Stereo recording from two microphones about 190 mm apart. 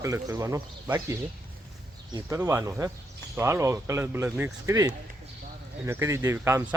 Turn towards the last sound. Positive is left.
turn(degrees=-15)  # may be behind; listen again after turning